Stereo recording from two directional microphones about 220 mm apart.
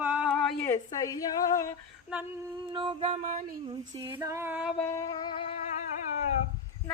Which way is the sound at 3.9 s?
20° right (ahead or behind).